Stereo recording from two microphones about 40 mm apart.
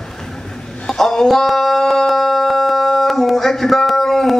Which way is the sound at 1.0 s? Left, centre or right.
Centre.